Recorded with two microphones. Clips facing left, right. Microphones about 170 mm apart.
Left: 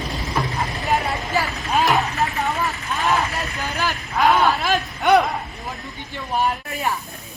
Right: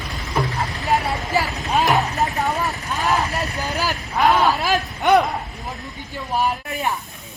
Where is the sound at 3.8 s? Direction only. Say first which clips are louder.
Even; centre (ahead or behind).